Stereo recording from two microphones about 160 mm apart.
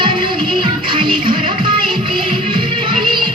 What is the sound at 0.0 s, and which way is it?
Music, 30° right (ahead or behind).